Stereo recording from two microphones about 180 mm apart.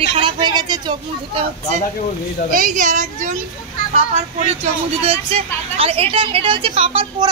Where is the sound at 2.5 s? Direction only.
45° right (ahead or behind).